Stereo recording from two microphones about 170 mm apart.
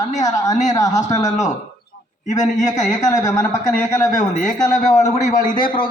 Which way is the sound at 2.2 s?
45° left (ahead or behind).